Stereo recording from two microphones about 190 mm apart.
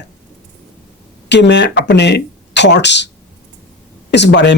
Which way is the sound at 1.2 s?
65° left (ahead or behind).